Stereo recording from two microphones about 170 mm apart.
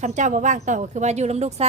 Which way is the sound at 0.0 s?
45° right (ahead or behind).